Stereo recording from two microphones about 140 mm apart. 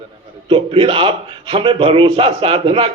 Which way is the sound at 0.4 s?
40° right (ahead or behind).